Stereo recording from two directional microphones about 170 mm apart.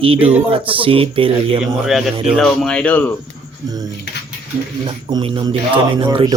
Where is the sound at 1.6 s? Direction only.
Centre (ahead or behind).